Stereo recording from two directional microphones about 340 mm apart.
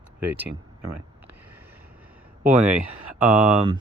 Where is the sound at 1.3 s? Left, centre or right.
Centre.